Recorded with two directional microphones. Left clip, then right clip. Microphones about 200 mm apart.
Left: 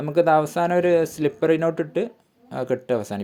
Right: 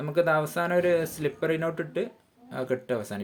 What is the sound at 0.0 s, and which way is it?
Speech, 30° left (ahead or behind).